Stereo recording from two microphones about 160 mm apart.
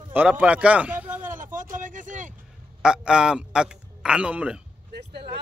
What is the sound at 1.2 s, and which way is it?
Vehicle, 55° right (ahead or behind).